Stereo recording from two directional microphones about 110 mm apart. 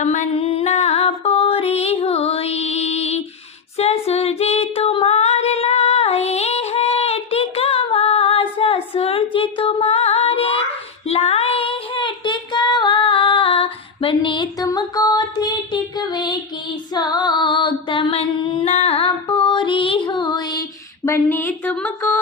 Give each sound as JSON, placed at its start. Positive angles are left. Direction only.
{"t": 0.0, "sound": "music", "side_deg": 80}
{"t": 3.8, "sound": "female singing", "side_deg": 75}
{"t": 11.0, "sound": "child singing", "side_deg": 70}
{"t": 14.6, "sound": "child singing", "side_deg": 35}
{"t": 16.9, "sound": "female singing", "side_deg": 40}
{"t": 18.7, "sound": "music", "side_deg": 70}
{"t": 21.0, "sound": "speech", "side_deg": 25}